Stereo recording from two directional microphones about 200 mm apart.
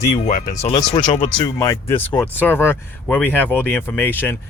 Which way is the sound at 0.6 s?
30° left (ahead or behind).